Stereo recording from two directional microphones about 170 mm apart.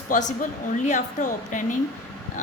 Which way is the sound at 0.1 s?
45° left (ahead or behind).